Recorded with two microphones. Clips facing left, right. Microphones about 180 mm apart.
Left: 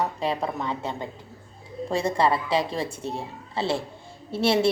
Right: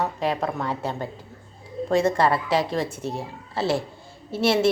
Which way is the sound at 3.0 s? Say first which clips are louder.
Right 2 dB; 5° right (ahead or behind).